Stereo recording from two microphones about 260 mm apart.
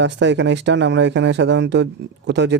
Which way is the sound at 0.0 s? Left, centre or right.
Right.